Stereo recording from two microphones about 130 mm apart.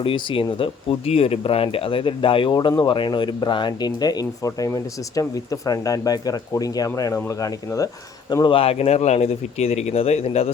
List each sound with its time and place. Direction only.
0.0 s speech: 45° left (ahead or behind)
8.5 s speech: 50° left (ahead or behind)